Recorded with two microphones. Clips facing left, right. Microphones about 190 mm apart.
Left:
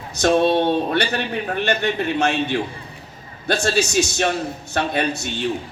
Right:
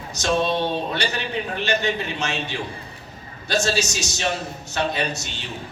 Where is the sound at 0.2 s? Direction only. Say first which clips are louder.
Left 5 dB; 55° left (ahead or behind).